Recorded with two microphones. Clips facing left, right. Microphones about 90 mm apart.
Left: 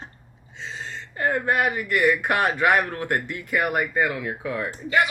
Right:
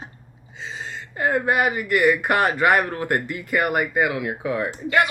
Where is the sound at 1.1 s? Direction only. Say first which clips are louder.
Right 2 dB; 5° right (ahead or behind).